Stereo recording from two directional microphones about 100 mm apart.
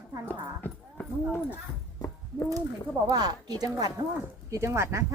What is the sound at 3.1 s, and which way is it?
Speech, 40° right (ahead or behind).